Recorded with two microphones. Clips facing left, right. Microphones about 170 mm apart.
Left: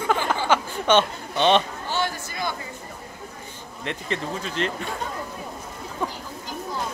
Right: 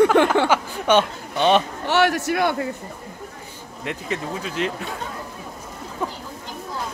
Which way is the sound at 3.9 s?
5° right (ahead or behind).